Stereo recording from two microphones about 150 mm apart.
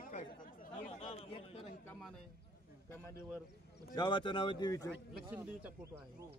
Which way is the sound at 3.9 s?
30° left (ahead or behind).